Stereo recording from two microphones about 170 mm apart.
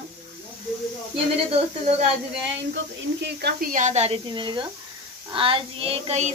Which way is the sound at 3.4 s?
75° right (ahead or behind).